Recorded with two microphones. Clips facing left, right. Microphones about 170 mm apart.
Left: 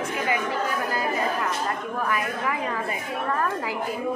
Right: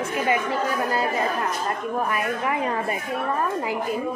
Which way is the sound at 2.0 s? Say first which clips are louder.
Even; 30° right (ahead or behind).